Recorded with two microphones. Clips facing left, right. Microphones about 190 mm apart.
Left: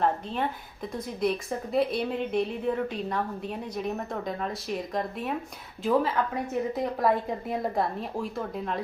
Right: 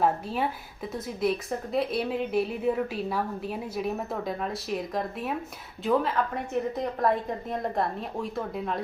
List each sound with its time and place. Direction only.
0.0 s a woman's voice: 5° right (ahead or behind)